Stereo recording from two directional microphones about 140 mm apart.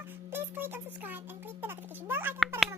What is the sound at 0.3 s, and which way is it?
A child's voice, 15° right (ahead or behind).